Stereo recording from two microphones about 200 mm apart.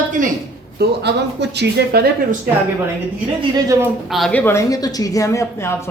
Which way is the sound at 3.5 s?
15° right (ahead or behind).